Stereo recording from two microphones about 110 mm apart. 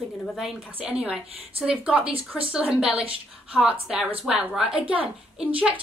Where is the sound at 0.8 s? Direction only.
10° right (ahead or behind).